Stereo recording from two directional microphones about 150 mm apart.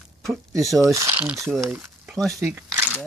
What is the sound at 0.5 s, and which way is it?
Speech, 25° right (ahead or behind).